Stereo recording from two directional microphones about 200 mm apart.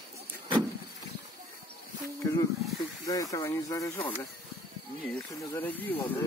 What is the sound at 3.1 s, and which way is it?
Speech, 15° left (ahead or behind).